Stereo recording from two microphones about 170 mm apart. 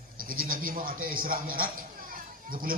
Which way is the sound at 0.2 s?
55° right (ahead or behind).